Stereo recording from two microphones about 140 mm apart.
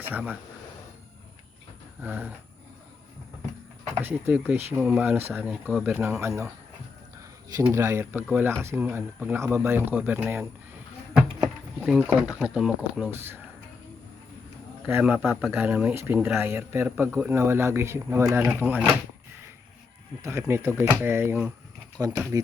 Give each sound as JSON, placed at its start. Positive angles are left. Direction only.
{"t": 0.0, "sound": "speech", "side_deg": -10}
{"t": 2.0, "sound": "speech", "side_deg": -10}
{"t": 3.9, "sound": "speech", "side_deg": -10}
{"t": 7.6, "sound": "speech", "side_deg": -20}
{"t": 11.9, "sound": "speech", "side_deg": 0}
{"t": 14.8, "sound": "speech", "side_deg": -15}
{"t": 20.2, "sound": "speech", "side_deg": -20}